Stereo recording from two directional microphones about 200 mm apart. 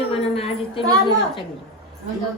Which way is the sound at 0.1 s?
30° left (ahead or behind).